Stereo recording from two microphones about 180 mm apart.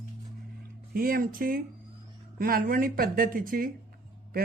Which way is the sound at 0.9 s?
55° right (ahead or behind).